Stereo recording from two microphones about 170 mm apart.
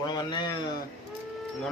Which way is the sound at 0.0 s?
25° left (ahead or behind).